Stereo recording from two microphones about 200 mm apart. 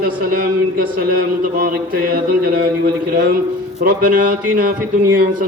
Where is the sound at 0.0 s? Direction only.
50° right (ahead or behind).